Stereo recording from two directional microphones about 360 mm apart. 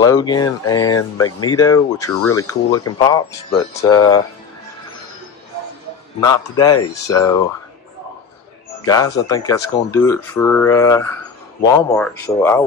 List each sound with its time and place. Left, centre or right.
0.0 s speech: centre
0.9 s speech: left
1.4 s speech: centre
6.6 s speech: centre
8.8 s speech: centre